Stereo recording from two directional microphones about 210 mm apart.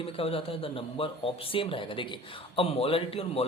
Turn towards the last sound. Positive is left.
turn(degrees=25)  # may be behind; listen again after turning